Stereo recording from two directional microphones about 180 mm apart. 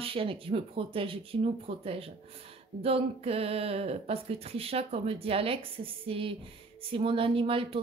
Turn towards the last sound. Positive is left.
turn(degrees=-30)  # may be behind; listen again after turning